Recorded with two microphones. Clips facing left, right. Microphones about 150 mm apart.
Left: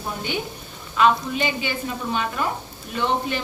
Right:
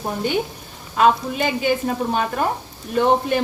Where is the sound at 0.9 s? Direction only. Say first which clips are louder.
Right 2 dB; 45° right (ahead or behind).